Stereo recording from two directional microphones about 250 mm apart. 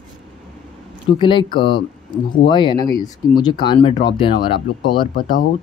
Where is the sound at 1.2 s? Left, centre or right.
Centre.